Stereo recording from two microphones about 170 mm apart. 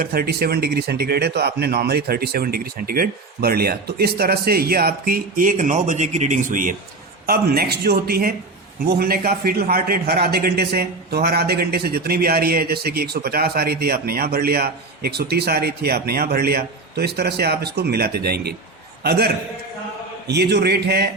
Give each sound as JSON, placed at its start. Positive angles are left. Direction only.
{"t": 0.0, "sound": "a man's voice", "side_deg": -60}
{"t": 7.3, "sound": "a man's voice", "side_deg": -65}